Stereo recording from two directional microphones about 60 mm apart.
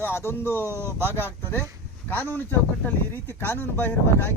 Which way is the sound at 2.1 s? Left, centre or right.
Left.